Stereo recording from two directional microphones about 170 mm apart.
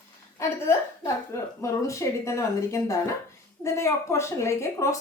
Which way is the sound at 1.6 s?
15° left (ahead or behind).